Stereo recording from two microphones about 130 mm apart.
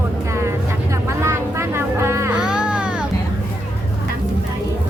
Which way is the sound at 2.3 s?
5° right (ahead or behind).